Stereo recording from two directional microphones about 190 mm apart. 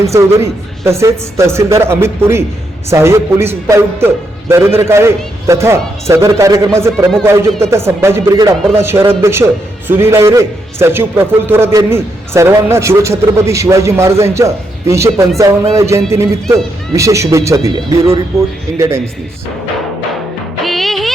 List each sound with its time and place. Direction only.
0.0 s speech: 15° right (ahead or behind)
7.7 s speech: 15° right (ahead or behind)
18.8 s speech: 15° right (ahead or behind)
20.7 s music: centre (ahead or behind)